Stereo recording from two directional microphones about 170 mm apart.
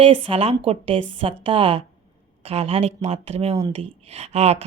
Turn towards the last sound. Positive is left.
turn(degrees=-40)  # may be behind; listen again after turning